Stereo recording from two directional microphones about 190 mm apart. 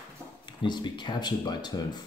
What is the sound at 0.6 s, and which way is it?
Speech, 25° left (ahead or behind).